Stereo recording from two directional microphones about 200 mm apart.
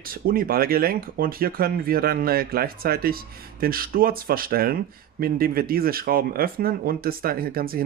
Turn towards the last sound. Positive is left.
turn(degrees=-50)  # may be behind; listen again after turning